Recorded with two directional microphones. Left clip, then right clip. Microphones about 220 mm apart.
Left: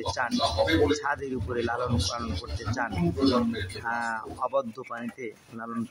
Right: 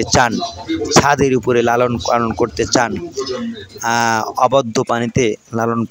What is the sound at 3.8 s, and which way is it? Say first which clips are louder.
Speech: right 16 dB; 40° right (ahead or behind).